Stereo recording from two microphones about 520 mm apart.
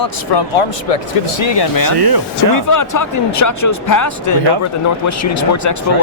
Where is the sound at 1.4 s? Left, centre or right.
Left.